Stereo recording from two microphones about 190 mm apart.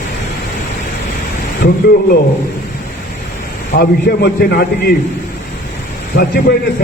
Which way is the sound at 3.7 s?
55° left (ahead or behind).